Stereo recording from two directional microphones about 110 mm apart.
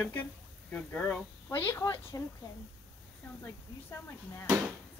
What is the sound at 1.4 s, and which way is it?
Speech, 25° left (ahead or behind).